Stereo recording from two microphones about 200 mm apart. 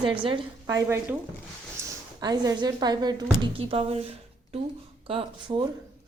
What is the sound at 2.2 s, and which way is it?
A woman's voice, 20° right (ahead or behind).